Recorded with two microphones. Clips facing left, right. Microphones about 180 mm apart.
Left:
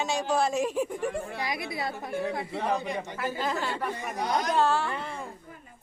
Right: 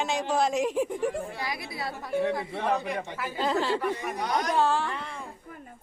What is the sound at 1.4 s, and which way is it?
Speech, 20° left (ahead or behind).